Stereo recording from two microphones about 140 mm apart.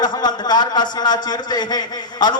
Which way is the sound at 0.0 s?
30° left (ahead or behind).